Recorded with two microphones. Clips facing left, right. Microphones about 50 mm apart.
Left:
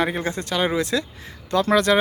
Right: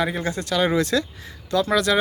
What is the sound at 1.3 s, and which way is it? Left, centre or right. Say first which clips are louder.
Speech: left 3 dB; left.